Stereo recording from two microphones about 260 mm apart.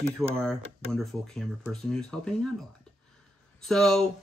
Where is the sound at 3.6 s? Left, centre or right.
Centre.